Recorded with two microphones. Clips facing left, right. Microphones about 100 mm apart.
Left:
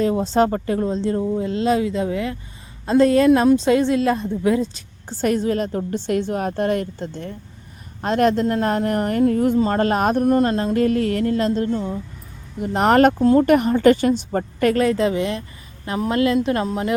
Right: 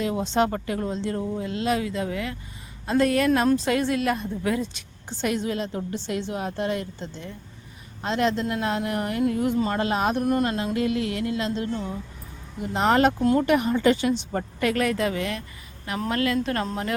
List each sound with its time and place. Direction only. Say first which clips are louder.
0.0 s a woman's voice: left 6 dB; 35° left (ahead or behind)
10.2 s speech: left 6 dB; 30° left (ahead or behind)
10.8 s a woman's voice: left 7 dB; 45° left (ahead or behind)
12.6 s speech: left 5 dB; 55° left (ahead or behind)
13.4 s a woman's voice: left 6 dB; 45° left (ahead or behind)
14.8 s a woman's voice: left 6 dB; 25° left (ahead or behind)